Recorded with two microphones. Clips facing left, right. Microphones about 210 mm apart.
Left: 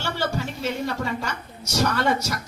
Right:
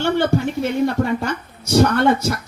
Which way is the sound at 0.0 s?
55° right (ahead or behind).